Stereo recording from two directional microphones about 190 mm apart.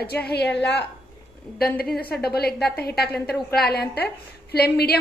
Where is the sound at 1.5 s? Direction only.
50° left (ahead or behind).